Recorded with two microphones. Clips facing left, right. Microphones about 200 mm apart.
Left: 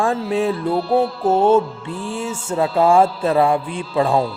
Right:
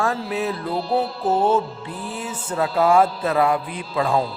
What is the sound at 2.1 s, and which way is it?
Speech, 25° left (ahead or behind).